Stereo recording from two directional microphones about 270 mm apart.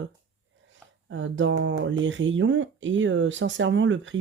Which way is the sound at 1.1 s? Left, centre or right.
Right.